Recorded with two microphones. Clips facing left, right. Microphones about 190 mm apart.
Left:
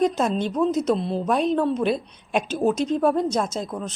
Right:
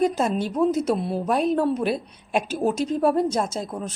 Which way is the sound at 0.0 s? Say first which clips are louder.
Even; 5° right (ahead or behind).